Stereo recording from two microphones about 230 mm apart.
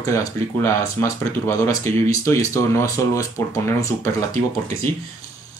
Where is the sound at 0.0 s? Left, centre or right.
Centre.